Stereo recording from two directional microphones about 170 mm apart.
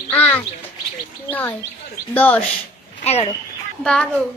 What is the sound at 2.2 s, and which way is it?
Speech, 10° left (ahead or behind).